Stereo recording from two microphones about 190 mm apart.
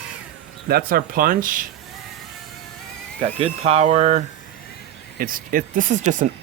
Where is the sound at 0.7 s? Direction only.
50° right (ahead or behind).